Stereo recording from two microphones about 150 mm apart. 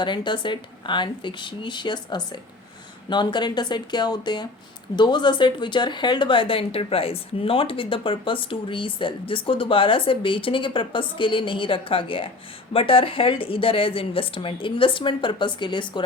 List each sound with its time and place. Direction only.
0.0 s speech: 30° left (ahead or behind)